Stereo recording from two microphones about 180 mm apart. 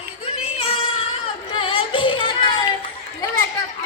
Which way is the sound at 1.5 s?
30° left (ahead or behind).